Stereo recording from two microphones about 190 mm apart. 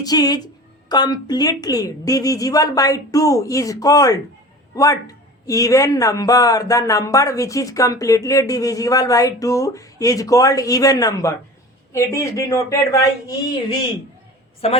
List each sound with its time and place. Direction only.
0.0 s speech: 20° left (ahead or behind)
14.6 s a woman's voice: 30° left (ahead or behind)